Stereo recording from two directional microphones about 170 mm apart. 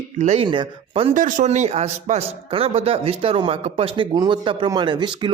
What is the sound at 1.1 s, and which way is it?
Speech, 50° right (ahead or behind).